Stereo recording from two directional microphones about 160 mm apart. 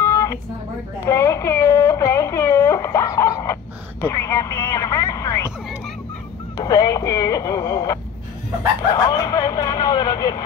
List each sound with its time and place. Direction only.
0.0 s a sound: 20° left (ahead or behind)
6.5 s speech: 20° left (ahead or behind)
9.0 s speech: 20° left (ahead or behind)